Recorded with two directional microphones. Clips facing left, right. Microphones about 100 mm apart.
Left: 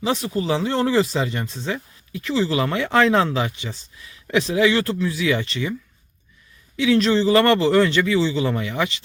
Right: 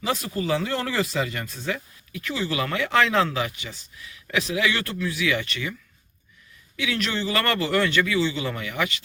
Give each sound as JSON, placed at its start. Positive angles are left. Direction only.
{"t": 0.0, "sound": "speech", "side_deg": 25}
{"t": 6.7, "sound": "speech", "side_deg": 30}